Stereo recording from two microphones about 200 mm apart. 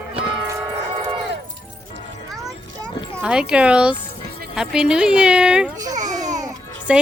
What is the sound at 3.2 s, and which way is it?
A woman's voice, 5° right (ahead or behind).